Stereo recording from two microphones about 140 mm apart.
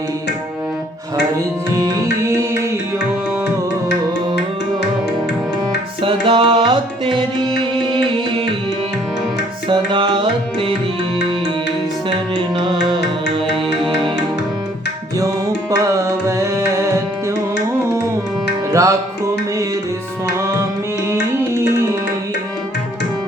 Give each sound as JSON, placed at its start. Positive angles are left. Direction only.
{"t": 1.7, "sound": "music", "side_deg": -25}
{"t": 6.0, "sound": "music", "side_deg": -40}
{"t": 9.6, "sound": "music", "side_deg": -35}
{"t": 12.5, "sound": "music", "side_deg": -35}
{"t": 15.2, "sound": "music", "side_deg": -25}
{"t": 18.7, "sound": "music", "side_deg": -20}
{"t": 21.1, "sound": "music", "side_deg": -20}